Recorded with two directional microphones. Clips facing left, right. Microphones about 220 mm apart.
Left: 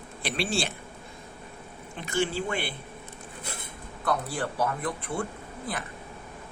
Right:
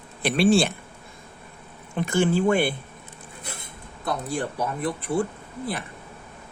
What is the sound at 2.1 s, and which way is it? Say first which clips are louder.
Speech: right 7 dB; 50° right (ahead or behind).